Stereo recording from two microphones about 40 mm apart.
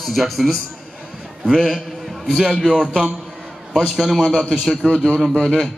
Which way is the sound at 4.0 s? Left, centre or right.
Centre.